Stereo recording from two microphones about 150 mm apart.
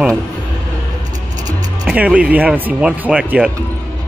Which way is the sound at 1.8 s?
10° right (ahead or behind).